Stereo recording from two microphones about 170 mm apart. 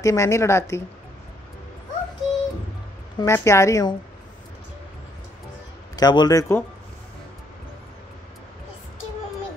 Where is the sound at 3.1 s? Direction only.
15° left (ahead or behind).